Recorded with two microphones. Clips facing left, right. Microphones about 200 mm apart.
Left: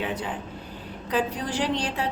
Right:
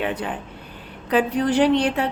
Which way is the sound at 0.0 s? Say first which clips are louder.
Right 4 dB; 65° right (ahead or behind).